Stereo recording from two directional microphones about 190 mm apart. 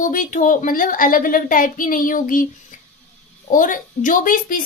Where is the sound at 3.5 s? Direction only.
45° left (ahead or behind).